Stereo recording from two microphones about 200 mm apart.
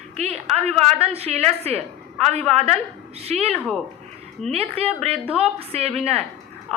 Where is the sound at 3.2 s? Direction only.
30° right (ahead or behind).